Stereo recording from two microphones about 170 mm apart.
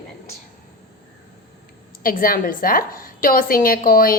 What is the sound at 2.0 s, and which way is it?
Speech, 55° left (ahead or behind).